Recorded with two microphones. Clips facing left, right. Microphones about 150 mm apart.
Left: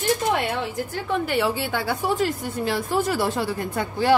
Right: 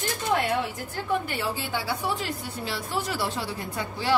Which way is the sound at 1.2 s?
75° left (ahead or behind).